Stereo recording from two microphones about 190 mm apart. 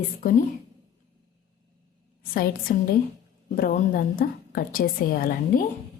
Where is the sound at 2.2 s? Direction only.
50° left (ahead or behind).